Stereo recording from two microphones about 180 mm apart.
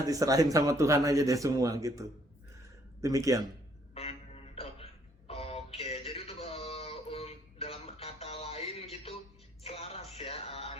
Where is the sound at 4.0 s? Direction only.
35° left (ahead or behind).